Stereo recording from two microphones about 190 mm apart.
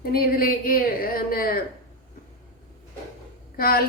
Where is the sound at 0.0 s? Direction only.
50° left (ahead or behind).